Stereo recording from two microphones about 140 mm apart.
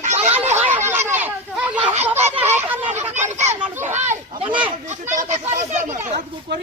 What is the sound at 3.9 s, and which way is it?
Speech, 55° right (ahead or behind).